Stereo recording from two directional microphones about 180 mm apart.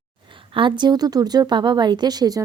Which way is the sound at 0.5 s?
25° right (ahead or behind).